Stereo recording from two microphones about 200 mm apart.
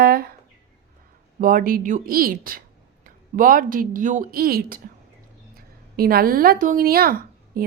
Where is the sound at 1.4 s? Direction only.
45° right (ahead or behind).